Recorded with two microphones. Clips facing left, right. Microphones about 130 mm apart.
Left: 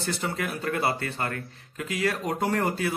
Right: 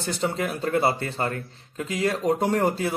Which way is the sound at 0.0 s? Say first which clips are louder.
Right 3 dB; 25° right (ahead or behind).